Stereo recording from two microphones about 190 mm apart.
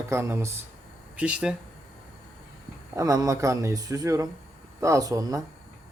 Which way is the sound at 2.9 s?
20° right (ahead or behind).